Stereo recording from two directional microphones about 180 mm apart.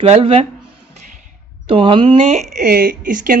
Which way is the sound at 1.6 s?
30° right (ahead or behind).